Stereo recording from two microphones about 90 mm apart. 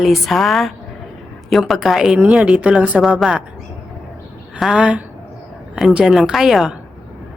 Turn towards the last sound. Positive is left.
turn(degrees=-5)  # may be behind; listen again after turning